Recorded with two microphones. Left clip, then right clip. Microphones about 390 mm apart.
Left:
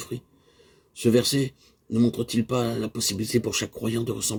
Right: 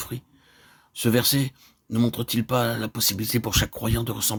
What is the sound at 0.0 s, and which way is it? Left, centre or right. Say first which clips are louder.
Speech: left 1 dB; right.